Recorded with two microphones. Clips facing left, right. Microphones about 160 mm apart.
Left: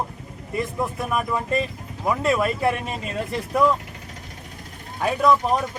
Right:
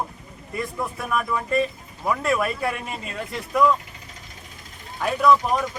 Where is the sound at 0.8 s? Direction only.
20° left (ahead or behind).